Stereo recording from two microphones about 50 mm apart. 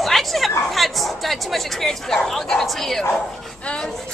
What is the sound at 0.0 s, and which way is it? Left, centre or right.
Chatter, centre.